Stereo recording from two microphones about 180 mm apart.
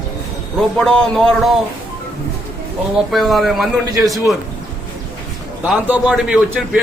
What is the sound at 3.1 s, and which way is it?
Speech, centre (ahead or behind).